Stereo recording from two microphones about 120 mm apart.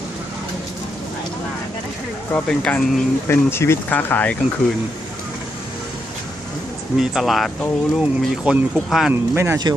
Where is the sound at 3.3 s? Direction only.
20° left (ahead or behind).